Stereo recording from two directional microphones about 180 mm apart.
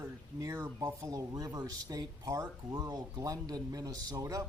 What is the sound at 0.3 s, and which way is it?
Speech, 20° right (ahead or behind).